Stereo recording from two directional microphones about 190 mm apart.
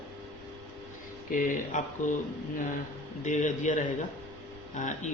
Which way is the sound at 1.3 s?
45° left (ahead or behind).